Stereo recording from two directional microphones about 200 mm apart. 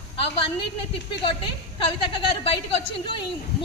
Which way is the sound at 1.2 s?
25° left (ahead or behind).